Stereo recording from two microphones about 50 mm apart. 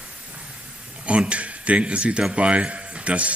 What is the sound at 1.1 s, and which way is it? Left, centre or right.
Speech, right.